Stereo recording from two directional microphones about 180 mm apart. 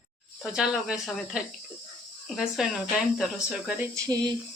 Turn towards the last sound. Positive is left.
turn(degrees=-20)  # may be behind; listen again after turning